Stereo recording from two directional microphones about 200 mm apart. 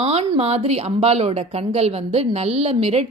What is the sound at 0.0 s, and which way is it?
A woman's voice, 30° right (ahead or behind).